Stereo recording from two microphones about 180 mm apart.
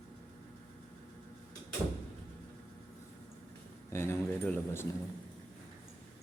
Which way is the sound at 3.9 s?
15° left (ahead or behind).